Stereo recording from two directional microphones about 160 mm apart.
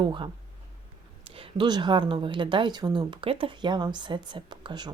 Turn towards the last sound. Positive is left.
turn(degrees=-25)  # may be behind; listen again after turning